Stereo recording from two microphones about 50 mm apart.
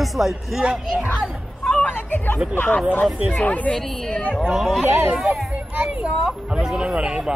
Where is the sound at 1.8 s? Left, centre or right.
Left.